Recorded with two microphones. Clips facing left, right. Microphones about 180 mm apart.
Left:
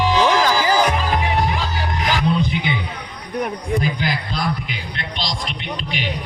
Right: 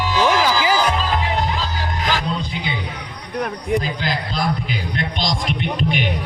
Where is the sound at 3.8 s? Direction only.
15° left (ahead or behind).